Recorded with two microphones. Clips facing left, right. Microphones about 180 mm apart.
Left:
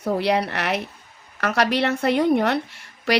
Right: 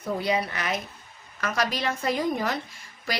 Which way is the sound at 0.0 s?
70° left (ahead or behind).